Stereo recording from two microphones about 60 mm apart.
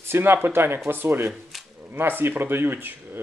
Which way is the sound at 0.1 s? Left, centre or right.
Right.